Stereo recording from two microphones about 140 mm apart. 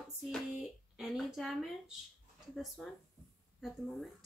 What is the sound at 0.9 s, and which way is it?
A woman's voice, centre (ahead or behind).